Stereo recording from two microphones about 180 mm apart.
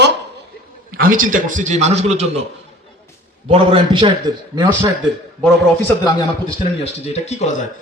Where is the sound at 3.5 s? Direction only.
30° right (ahead or behind).